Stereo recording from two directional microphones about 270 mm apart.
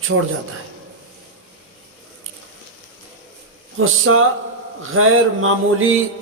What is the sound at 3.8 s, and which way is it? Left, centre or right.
A man's voice, right.